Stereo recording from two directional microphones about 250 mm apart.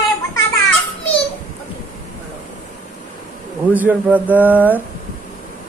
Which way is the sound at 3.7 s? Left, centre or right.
Centre.